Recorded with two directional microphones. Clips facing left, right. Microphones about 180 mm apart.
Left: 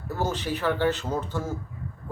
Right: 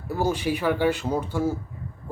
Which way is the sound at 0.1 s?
10° right (ahead or behind).